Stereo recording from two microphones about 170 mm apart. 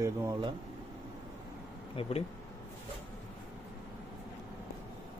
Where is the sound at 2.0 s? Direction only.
35° left (ahead or behind).